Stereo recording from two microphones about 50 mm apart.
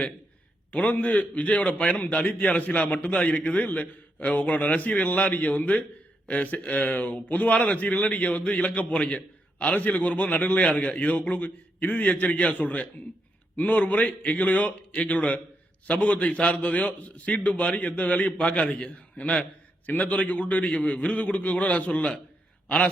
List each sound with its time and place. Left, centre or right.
0.7 s a man's voice: left